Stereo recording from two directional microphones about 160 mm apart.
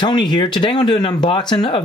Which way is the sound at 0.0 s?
30° left (ahead or behind).